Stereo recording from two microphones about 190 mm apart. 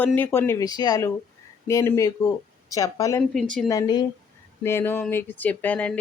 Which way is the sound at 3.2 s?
Centre (ahead or behind).